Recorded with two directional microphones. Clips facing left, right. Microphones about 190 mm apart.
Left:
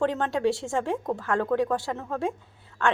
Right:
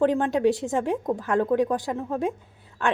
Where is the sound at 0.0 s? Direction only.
15° right (ahead or behind).